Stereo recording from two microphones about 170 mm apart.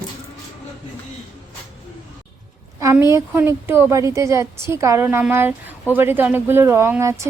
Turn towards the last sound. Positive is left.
turn(degrees=-15)  # may be behind; listen again after turning